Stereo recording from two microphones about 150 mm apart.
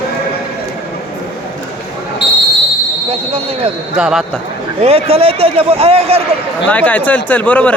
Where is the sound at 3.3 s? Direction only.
40° right (ahead or behind).